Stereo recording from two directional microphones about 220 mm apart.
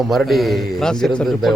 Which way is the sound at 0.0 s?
Centre (ahead or behind).